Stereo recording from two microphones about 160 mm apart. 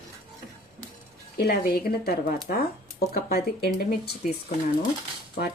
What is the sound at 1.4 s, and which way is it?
Speech, 75° left (ahead or behind).